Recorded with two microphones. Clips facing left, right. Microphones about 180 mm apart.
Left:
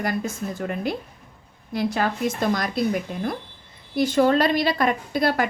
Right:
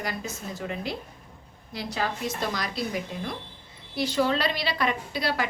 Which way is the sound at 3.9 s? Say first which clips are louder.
Left 7 dB; 50° left (ahead or behind).